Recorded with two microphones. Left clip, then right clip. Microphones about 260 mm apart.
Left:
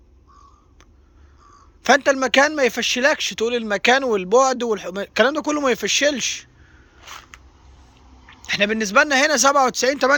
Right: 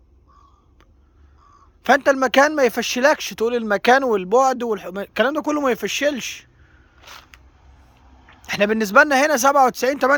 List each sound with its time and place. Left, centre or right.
1.8 s speech: centre
7.0 s a sound: centre
8.3 s speech: centre